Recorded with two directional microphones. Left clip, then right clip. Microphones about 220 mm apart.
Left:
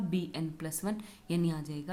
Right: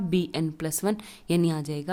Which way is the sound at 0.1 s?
45° right (ahead or behind).